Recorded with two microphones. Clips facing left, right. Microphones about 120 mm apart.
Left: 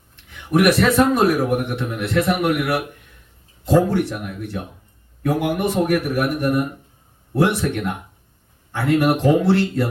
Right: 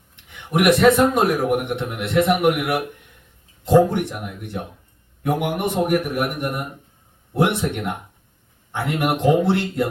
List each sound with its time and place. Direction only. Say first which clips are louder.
0.5 s a man's voice: right 1 dB; 20° right (ahead or behind)